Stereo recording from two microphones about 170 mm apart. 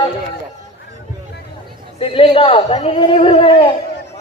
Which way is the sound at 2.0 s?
35° left (ahead or behind).